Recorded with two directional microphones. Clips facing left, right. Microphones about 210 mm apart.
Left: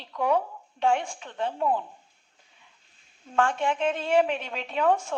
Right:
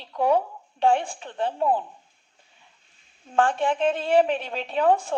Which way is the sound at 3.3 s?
35° right (ahead or behind).